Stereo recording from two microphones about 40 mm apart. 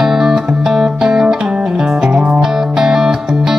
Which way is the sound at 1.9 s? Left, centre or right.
Right.